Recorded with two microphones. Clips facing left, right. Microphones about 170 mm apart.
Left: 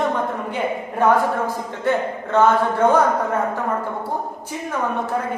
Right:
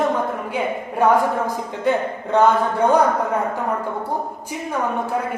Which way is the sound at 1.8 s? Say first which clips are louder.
Right 1 dB; 15° right (ahead or behind).